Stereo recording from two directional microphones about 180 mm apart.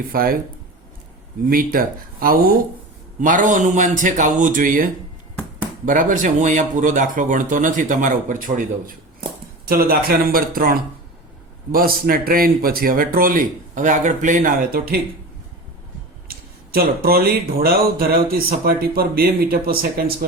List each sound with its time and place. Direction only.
0.1 s speech: 55° right (ahead or behind)
1.5 s speech: 50° right (ahead or behind)
9.6 s speech: 55° right (ahead or behind)
16.3 s a sound: 55° right (ahead or behind)
17.6 s speech: 55° right (ahead or behind)